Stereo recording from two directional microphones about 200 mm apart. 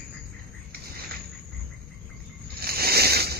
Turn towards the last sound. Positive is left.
turn(degrees=-50)  # may be behind; listen again after turning